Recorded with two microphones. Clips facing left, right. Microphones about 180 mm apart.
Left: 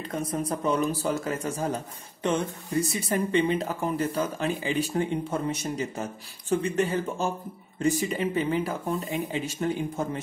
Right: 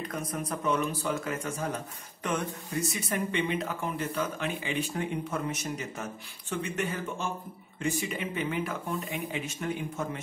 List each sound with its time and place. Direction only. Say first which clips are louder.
0.1 s speech: left 5 dB; 30° left (ahead or behind)